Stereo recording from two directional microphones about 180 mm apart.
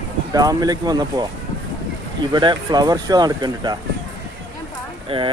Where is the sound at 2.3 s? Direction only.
25° right (ahead or behind).